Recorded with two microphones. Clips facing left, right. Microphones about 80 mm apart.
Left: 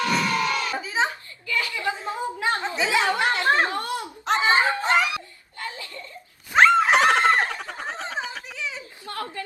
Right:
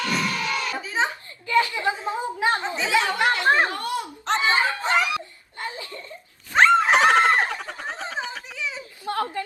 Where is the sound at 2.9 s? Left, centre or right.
Left.